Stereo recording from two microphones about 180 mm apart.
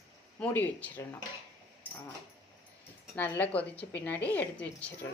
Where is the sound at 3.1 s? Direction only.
10° left (ahead or behind).